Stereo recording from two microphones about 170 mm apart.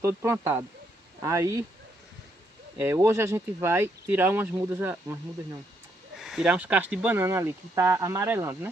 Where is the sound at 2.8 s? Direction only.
15° right (ahead or behind).